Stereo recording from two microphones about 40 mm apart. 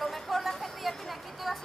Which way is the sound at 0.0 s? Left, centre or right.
Centre.